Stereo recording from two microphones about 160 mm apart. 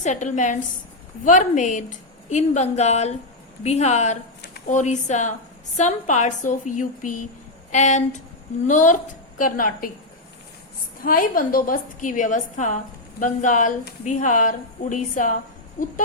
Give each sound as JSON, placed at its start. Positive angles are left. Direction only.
{"t": 0.0, "sound": "a woman's voice", "side_deg": 50}
{"t": 11.0, "sound": "a woman's voice", "side_deg": 60}